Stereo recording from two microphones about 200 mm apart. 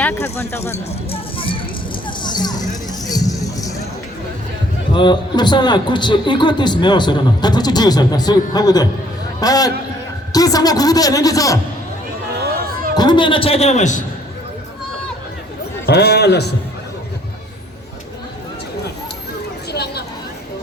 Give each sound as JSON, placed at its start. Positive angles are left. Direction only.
{"t": 0.0, "sound": "a woman's voice", "side_deg": 10}
{"t": 1.1, "sound": "music", "side_deg": 25}
{"t": 2.0, "sound": "vehicle", "side_deg": 20}
{"t": 3.1, "sound": "music", "side_deg": 15}
{"t": 4.9, "sound": "a man's voice", "side_deg": 20}
{"t": 13.0, "sound": "a man's voice", "side_deg": 25}
{"t": 15.9, "sound": "a man's voice", "side_deg": 55}
{"t": 19.7, "sound": "chatter", "side_deg": 55}